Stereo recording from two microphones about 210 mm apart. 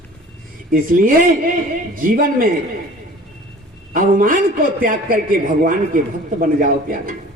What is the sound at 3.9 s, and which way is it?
A man's voice, 40° right (ahead or behind).